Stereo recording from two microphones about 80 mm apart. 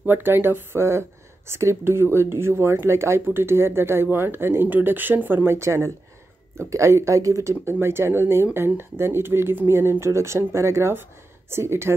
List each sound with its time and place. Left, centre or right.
0.0 s speech: right